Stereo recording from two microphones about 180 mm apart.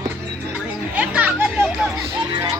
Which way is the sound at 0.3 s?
5° right (ahead or behind).